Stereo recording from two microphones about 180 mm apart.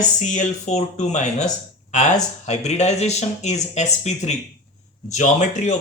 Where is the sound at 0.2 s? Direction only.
40° left (ahead or behind).